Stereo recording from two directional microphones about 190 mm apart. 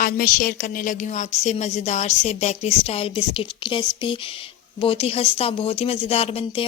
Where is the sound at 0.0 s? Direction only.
50° left (ahead or behind).